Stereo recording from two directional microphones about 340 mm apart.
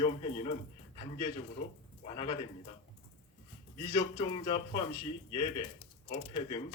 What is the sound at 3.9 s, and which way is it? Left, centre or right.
Speech, centre.